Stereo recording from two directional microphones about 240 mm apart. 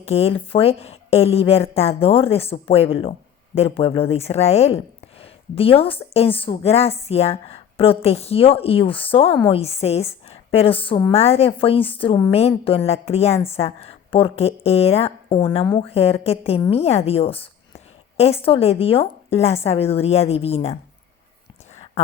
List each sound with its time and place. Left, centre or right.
0.0 s speech: left